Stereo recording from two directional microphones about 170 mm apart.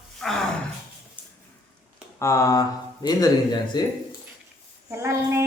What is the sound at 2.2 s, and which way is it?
Speech, 15° left (ahead or behind).